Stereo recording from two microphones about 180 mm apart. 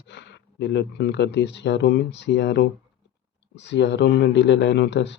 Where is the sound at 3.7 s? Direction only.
80° left.